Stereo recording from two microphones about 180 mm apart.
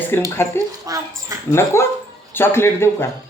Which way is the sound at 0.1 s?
10° left (ahead or behind).